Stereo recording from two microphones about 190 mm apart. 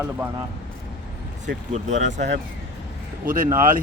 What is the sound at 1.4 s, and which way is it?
Speech, 40° right (ahead or behind).